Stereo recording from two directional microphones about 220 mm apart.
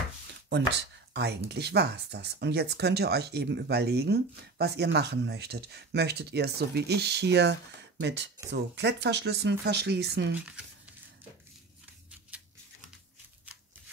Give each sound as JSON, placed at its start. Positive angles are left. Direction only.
{"t": 0.5, "sound": "speech", "side_deg": -50}